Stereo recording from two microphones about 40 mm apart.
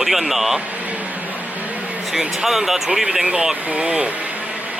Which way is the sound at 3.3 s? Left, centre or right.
Right.